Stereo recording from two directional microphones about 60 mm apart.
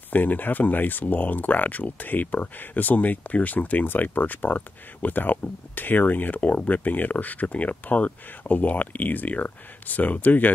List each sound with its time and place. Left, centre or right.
0.1 s speech: left